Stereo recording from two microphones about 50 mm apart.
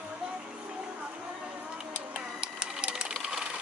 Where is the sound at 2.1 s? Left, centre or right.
Centre.